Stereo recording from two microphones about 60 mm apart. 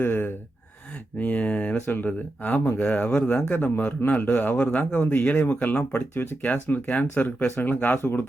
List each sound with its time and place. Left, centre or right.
0.0 s gasp: left
1.2 s speech: left